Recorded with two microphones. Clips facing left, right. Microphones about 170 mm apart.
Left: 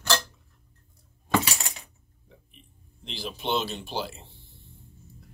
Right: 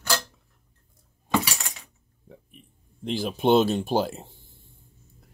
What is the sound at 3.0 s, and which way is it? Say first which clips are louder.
Speech: right 10 dB; 45° right (ahead or behind).